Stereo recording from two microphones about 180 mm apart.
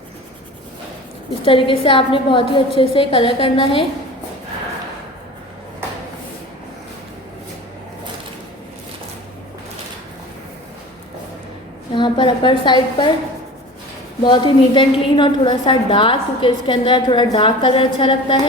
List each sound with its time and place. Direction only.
1.5 s a woman's voice: 30° left (ahead or behind)
11.9 s a woman's voice: 25° left (ahead or behind)
14.3 s a woman's voice: 25° left (ahead or behind)